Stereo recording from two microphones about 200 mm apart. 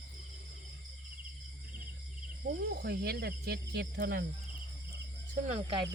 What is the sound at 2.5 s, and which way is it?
Speech, 50° right (ahead or behind).